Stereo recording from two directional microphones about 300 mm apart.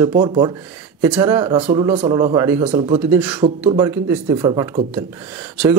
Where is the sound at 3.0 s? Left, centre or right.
Centre.